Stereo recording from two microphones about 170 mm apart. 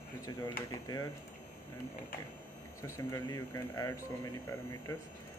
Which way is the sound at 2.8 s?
20° left (ahead or behind).